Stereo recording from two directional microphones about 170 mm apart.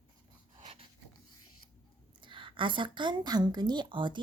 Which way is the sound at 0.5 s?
35° right (ahead or behind).